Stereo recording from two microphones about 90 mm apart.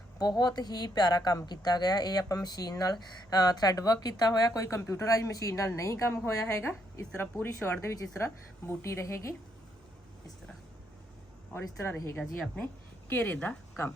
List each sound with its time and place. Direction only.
0.2 s speech: 45° left (ahead or behind)
11.5 s a woman's voice: 25° left (ahead or behind)
13.1 s a woman's voice: 20° left (ahead or behind)